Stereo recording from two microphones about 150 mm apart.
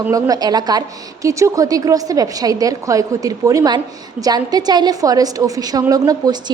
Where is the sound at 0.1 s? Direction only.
25° right (ahead or behind).